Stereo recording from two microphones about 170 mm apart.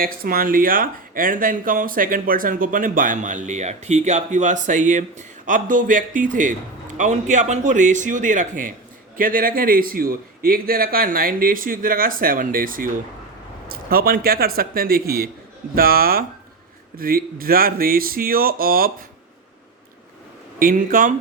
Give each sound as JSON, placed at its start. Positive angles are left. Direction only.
{"t": 0.0, "sound": "a man's voice", "side_deg": -60}
{"t": 20.6, "sound": "a man's voice", "side_deg": -55}